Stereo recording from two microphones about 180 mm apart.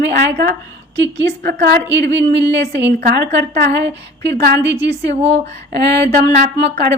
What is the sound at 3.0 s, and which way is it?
Speech, 55° right (ahead or behind).